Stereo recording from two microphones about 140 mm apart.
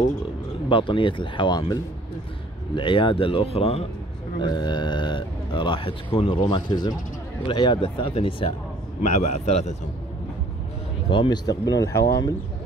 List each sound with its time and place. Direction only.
0.7 s speech: 35° left (ahead or behind)
4.4 s speech: 30° left (ahead or behind)
9.0 s a man's voice: 55° left (ahead or behind)
11.1 s speech: 35° left (ahead or behind)